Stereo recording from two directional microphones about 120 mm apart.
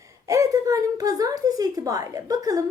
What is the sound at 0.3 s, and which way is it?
A woman's voice, 25° right (ahead or behind).